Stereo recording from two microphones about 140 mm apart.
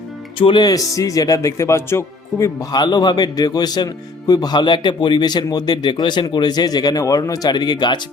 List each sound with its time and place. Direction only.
0.3 s speech: 35° left (ahead or behind)